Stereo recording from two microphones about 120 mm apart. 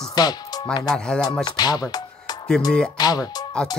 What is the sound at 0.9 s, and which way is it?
Speech, 5° left (ahead or behind).